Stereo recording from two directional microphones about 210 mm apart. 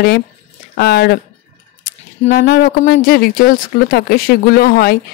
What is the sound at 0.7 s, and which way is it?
Speech, 50° left (ahead or behind).